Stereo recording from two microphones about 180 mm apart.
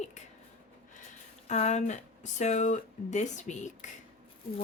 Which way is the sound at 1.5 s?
40° left (ahead or behind).